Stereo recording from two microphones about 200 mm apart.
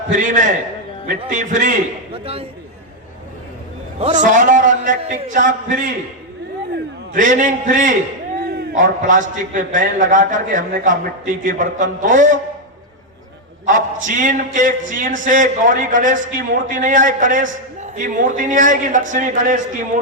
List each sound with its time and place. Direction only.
0.1 s a man's voice: 40° right (ahead or behind)
4.2 s a man's voice: 40° right (ahead or behind)
7.1 s a man's voice: 40° right (ahead or behind)
13.7 s a man's voice: 40° right (ahead or behind)